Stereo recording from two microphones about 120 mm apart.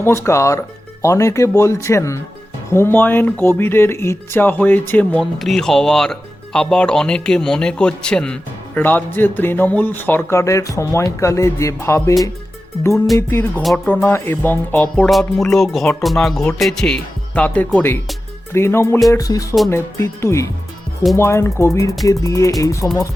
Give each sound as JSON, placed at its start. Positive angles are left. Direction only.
{"t": 0.0, "sound": "speech", "side_deg": 20}
{"t": 5.4, "sound": "speech", "side_deg": 5}
{"t": 13.1, "sound": "speech", "side_deg": 20}
{"t": 13.6, "sound": "speech", "side_deg": 0}
{"t": 13.9, "sound": "speech", "side_deg": 15}